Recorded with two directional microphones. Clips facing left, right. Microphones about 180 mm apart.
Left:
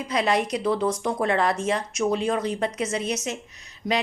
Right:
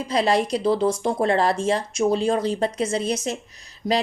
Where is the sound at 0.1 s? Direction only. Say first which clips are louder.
Right 3 dB; 30° right (ahead or behind).